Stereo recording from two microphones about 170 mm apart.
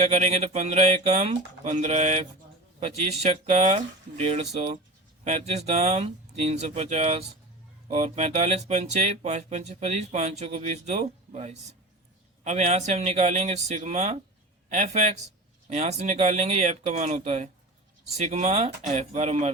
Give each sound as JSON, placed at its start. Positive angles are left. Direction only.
{"t": 0.0, "sound": "speech", "side_deg": -40}
{"t": 5.2, "sound": "speech", "side_deg": -40}